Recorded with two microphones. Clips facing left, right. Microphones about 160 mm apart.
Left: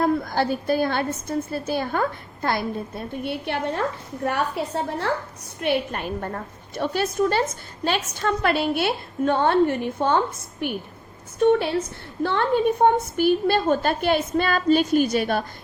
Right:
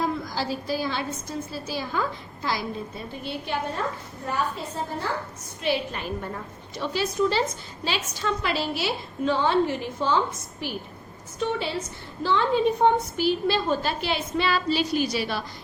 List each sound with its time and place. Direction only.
0.0 s a woman's voice: 55° left (ahead or behind); by 5.0 s 75° left (ahead or behind)
5.5 s a woman's voice: 55° left (ahead or behind)